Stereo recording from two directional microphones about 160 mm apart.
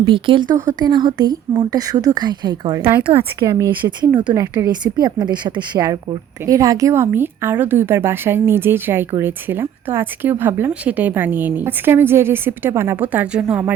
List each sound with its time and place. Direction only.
0.0 s a woman's voice: 30° right (ahead or behind)
2.8 s a woman's voice: 15° right (ahead or behind)
3.5 s a woman's voice: 30° right (ahead or behind); by 13.7 s 10° right (ahead or behind)